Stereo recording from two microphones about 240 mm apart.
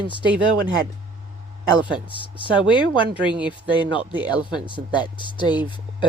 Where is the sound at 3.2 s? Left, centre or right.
Centre.